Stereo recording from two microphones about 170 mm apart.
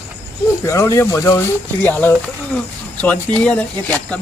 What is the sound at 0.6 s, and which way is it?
Speech, 15° left (ahead or behind).